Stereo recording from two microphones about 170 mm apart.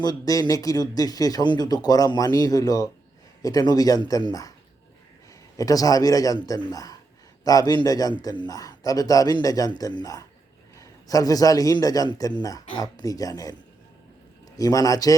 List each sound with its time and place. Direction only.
0.0 s a man's voice: 20° left (ahead or behind)
5.5 s a man's voice: 20° left (ahead or behind)